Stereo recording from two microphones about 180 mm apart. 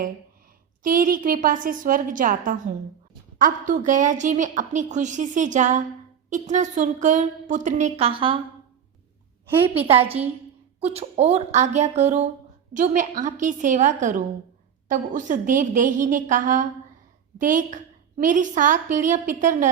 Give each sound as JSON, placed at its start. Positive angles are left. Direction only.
{"t": 0.8, "sound": "a woman's voice", "side_deg": -50}
{"t": 9.6, "sound": "a woman's voice", "side_deg": -30}